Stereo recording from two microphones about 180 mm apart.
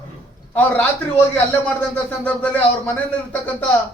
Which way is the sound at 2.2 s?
10° left (ahead or behind).